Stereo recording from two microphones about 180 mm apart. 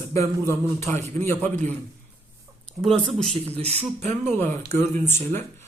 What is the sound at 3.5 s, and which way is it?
Speech, 35° right (ahead or behind).